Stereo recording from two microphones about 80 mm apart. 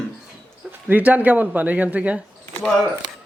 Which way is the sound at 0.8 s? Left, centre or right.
Right.